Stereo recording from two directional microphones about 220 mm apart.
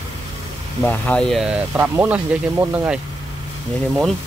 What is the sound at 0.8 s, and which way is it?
Speech, 5° left (ahead or behind).